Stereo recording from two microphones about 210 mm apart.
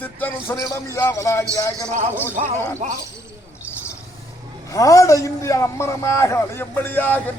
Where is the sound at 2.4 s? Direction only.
35° right (ahead or behind).